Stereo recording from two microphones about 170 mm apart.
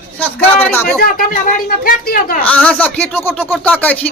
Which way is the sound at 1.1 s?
55° left (ahead or behind).